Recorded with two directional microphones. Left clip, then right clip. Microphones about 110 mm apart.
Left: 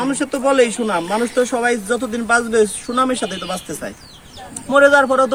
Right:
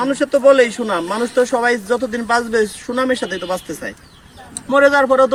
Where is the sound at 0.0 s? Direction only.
25° left (ahead or behind).